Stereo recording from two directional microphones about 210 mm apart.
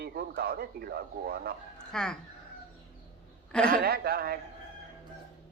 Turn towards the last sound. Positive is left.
turn(degrees=-45)  # may be behind; listen again after turning